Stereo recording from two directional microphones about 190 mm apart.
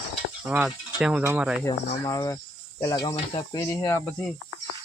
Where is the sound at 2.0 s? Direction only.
20° left (ahead or behind).